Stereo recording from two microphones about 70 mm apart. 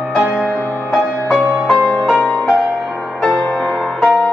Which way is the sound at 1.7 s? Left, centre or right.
Left.